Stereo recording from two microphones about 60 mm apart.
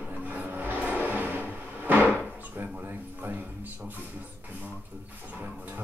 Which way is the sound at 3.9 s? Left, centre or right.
Right.